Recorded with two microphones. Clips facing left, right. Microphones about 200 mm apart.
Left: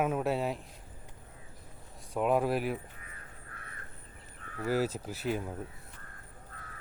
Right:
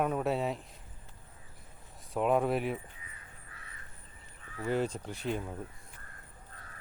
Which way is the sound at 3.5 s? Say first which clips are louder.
Left 4 dB; 55° left (ahead or behind).